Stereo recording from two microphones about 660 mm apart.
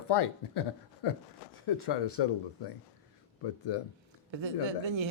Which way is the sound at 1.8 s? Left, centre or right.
Left.